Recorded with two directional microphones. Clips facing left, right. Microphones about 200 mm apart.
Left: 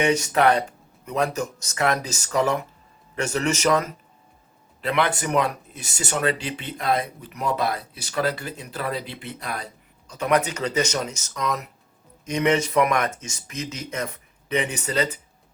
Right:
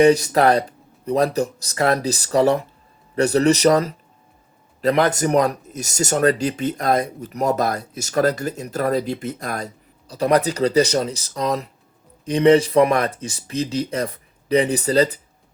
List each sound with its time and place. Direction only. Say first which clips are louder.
0.0 s speech: right 6 dB; 35° right (ahead or behind)